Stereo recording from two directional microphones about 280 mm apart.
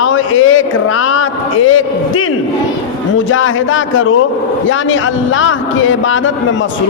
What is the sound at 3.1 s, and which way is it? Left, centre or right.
A man's voice, left.